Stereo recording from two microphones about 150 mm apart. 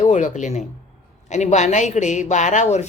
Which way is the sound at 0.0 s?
55° left (ahead or behind).